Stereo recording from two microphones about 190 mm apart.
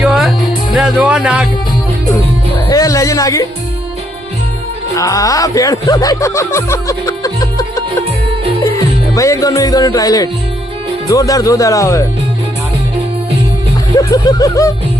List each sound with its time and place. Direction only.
0.0 s music: centre (ahead or behind)
2.6 s speech: 15° left (ahead or behind)
4.9 s speech: 15° left (ahead or behind)
9.1 s music: 15° left (ahead or behind)
11.1 s speech: 20° left (ahead or behind)
13.9 s snicker: 20° left (ahead or behind)